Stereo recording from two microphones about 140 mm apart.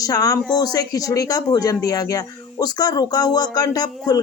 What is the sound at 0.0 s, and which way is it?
Speech, 25° left (ahead or behind).